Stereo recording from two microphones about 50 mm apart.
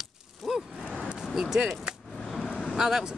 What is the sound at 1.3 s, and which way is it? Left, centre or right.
Speech, centre.